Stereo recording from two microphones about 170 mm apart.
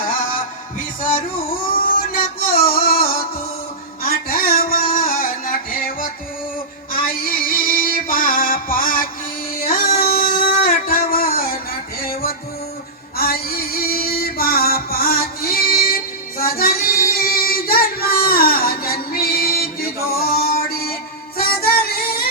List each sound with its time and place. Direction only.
2.1 s music: 60° left (ahead or behind)
9.6 s a sound: 60° left (ahead or behind)
13.1 s female singing: 60° left (ahead or behind)
16.4 s child singing: 60° left (ahead or behind)
20.1 s music: 60° left (ahead or behind)